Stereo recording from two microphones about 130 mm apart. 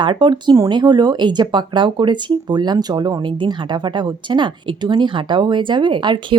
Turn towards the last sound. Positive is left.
turn(degrees=-40)  # may be behind; listen again after turning